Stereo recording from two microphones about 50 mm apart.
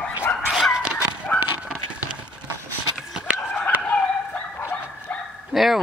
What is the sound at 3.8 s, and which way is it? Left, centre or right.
Dog, left.